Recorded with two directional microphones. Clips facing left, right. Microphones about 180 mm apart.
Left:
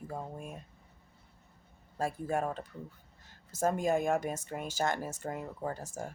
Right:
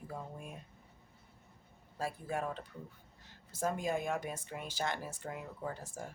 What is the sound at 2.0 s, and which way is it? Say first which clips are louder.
Speech: left 5 dB; 45° left (ahead or behind).